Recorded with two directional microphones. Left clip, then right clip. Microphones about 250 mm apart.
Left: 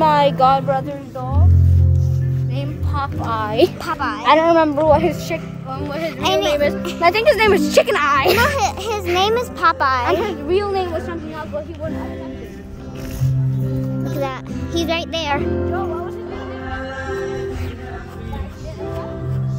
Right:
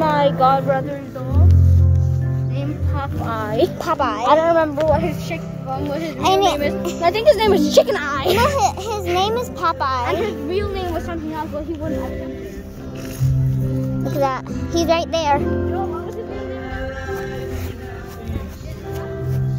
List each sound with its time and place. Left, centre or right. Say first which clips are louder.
0.0 s a sound: left 2 dB; left
2.5 s music: left 2 dB; left
3.8 s a woman's voice: right 3 dB; centre
4.3 s speech: left 3 dB; left
5.7 s a child's voice: even; centre
7.0 s a child's voice: left 1 dB; centre
8.5 s a child's voice: right 1 dB; centre
14.0 s a child's voice: right 6 dB; centre